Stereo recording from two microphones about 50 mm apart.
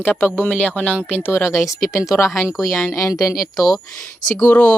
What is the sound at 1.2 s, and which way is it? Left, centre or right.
Speech, left.